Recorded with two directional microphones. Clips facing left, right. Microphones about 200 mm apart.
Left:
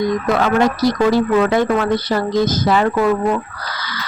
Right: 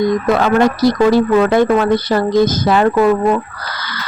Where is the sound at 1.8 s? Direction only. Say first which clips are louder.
Right 4 dB; 45° right (ahead or behind).